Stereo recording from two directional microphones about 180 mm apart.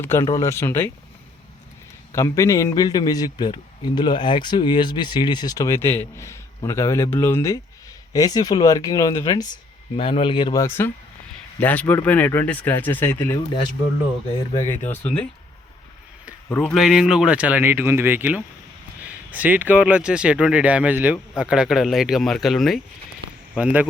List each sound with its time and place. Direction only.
0.0 s speech: 15° left (ahead or behind)
2.1 s a man's voice: 15° left (ahead or behind)
10.0 s a man's voice: 30° left (ahead or behind)
14.6 s speech: 10° left (ahead or behind)
16.6 s speech: centre (ahead or behind)